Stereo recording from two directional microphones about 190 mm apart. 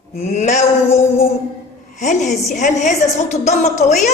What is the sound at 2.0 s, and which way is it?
Speech, 40° left (ahead or behind).